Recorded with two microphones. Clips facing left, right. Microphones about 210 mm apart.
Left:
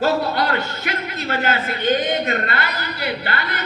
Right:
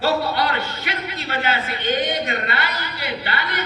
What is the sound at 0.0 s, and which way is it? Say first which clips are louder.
A man's voice: left 1 dB; 45° left (ahead or behind).